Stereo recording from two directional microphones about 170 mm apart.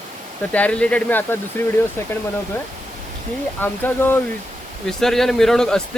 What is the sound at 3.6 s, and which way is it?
Speech, 10° left (ahead or behind).